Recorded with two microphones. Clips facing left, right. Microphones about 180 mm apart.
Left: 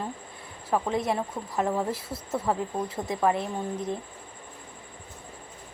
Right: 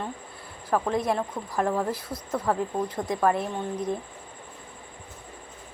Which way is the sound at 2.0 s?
25° left (ahead or behind).